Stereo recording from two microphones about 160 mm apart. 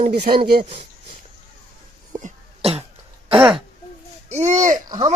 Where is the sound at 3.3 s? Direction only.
5° right (ahead or behind).